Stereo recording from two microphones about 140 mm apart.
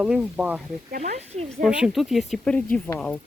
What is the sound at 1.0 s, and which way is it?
Speech, 55° right (ahead or behind).